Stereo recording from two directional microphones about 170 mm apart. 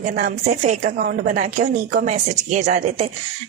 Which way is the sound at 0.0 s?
60° right (ahead or behind).